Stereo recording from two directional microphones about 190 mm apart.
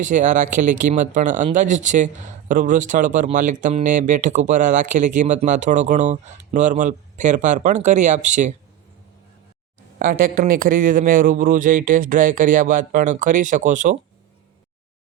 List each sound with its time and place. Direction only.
0.0 s speech: 40° right (ahead or behind)
10.0 s speech: 45° right (ahead or behind)